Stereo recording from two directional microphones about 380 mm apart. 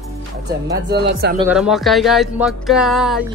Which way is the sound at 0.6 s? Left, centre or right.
Right.